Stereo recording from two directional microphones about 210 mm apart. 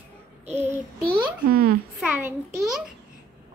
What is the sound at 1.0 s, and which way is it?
Speech, 45° right (ahead or behind).